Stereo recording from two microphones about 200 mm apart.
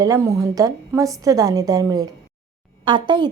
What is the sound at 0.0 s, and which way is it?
A woman's voice, 15° right (ahead or behind).